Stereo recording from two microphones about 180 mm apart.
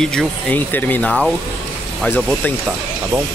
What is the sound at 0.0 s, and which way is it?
Speech, 5° left (ahead or behind).